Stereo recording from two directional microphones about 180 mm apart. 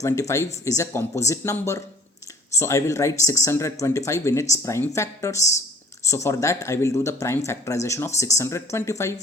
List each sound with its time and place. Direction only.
0.0 s speech: 15° left (ahead or behind)